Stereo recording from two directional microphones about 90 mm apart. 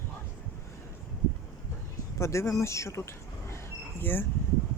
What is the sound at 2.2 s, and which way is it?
Speech, 30° left (ahead or behind).